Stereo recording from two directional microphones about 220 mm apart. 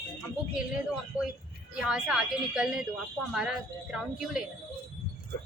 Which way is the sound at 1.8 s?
Centre (ahead or behind).